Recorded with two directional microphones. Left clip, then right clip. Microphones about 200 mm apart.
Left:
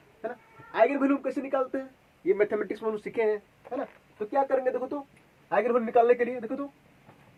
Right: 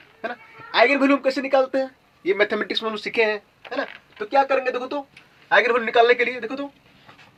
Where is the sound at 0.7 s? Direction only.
30° right (ahead or behind).